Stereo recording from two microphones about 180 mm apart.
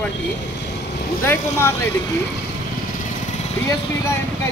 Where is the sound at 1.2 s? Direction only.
15° left (ahead or behind).